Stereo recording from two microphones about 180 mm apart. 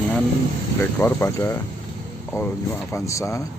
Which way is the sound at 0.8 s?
15° left (ahead or behind).